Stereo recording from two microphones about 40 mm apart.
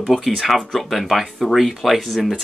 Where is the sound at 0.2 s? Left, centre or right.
Centre.